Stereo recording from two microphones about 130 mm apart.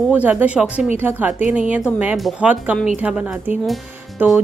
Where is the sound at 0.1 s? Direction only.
10° right (ahead or behind).